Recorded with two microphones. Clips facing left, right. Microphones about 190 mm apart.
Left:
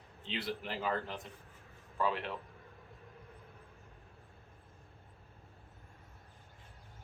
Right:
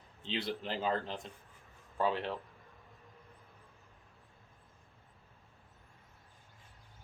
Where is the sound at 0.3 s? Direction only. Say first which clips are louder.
Right 2 dB; 30° right (ahead or behind).